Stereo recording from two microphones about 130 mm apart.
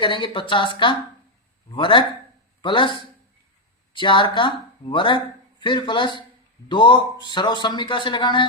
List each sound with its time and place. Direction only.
0.0 s a man's voice: 40° left (ahead or behind)